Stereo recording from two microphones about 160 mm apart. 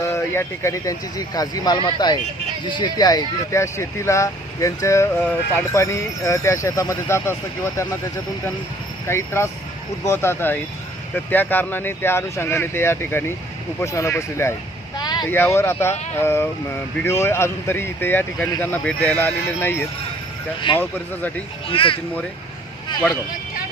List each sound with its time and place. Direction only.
0.0 s speech: 15° left (ahead or behind)
9.0 s speech: 15° left (ahead or behind)
14.9 s vehicle: 25° left (ahead or behind)
15.5 s speech: 15° left (ahead or behind)
20.7 s speech: 10° left (ahead or behind)
21.7 s speech: 35° left (ahead or behind)